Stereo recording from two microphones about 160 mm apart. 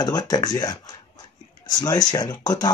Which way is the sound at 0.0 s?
25° left (ahead or behind).